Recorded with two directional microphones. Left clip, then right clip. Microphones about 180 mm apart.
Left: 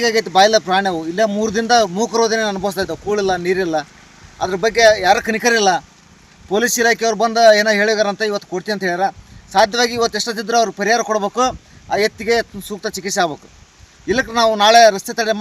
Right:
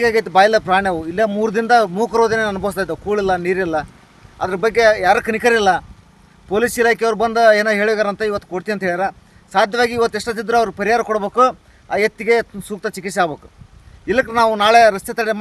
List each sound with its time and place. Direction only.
0.2 s a man's voice: 5° right (ahead or behind)
7.0 s a man's voice: 5° right (ahead or behind)
10.1 s speech: 30° right (ahead or behind)
10.3 s a man's voice: 5° right (ahead or behind)
12.9 s speech: 30° right (ahead or behind)
14.1 s a man's voice: 5° right (ahead or behind)